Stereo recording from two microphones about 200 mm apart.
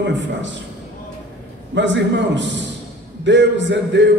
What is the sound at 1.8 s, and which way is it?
A man's voice, 60° right (ahead or behind).